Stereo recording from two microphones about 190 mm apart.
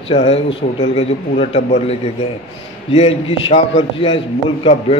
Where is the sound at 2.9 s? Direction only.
35° left (ahead or behind).